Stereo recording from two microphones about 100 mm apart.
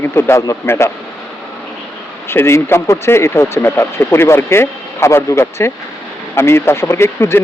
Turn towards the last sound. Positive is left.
turn(degrees=25)  # may be behind; listen again after turning